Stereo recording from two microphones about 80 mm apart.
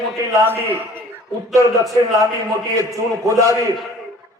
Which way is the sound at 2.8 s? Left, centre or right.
Right.